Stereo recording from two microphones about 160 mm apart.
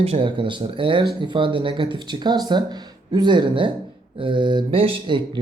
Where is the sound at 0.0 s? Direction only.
35° right (ahead or behind).